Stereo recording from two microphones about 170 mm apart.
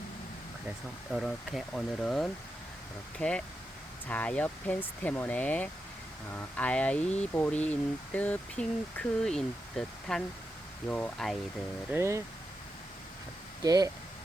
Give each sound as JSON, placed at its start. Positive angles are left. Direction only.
{"t": 1.1, "sound": "speech", "side_deg": 0}
{"t": 11.9, "sound": "speech", "side_deg": -15}
{"t": 13.6, "sound": "speech", "side_deg": -20}